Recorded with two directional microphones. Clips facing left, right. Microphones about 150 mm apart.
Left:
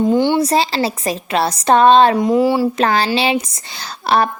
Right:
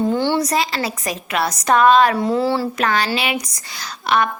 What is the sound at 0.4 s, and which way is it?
A woman's voice, 30° left (ahead or behind).